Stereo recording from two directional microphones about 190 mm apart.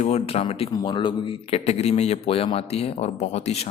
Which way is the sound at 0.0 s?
30° left (ahead or behind).